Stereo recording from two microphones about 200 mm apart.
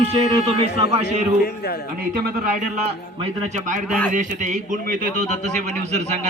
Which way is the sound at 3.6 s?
40° right (ahead or behind).